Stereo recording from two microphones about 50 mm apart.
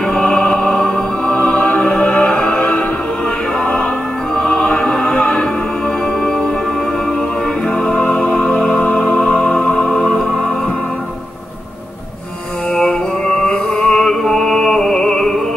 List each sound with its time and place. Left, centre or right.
0.0 s music: centre
4.4 s music: centre
7.6 s music: centre
8.8 s music: left
12.7 s music: centre